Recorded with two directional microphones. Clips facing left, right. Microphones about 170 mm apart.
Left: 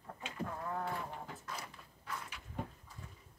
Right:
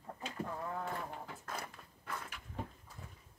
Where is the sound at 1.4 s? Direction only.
50° right (ahead or behind).